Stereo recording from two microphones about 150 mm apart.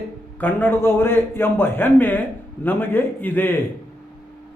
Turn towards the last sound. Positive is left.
turn(degrees=15)  # may be behind; listen again after turning